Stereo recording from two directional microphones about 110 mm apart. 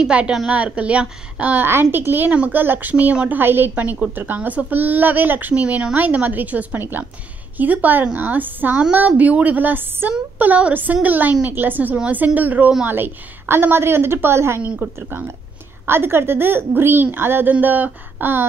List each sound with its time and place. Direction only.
0.0 s a woman's voice: 10° right (ahead or behind)